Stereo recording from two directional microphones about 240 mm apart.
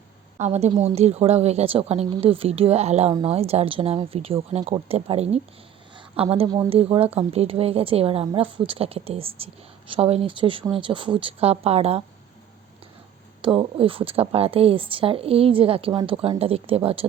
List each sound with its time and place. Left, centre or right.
0.3 s a woman's voice: right
13.4 s a woman's voice: right